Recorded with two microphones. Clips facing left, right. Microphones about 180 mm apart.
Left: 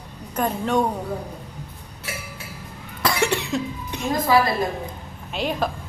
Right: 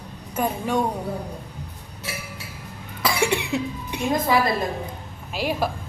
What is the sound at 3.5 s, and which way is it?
A woman's voice, 15° right (ahead or behind).